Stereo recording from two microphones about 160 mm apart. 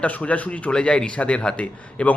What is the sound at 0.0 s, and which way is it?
Speech, 10° left (ahead or behind).